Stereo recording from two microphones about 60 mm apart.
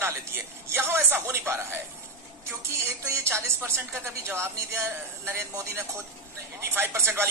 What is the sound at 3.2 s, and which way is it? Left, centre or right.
A woman's voice, right.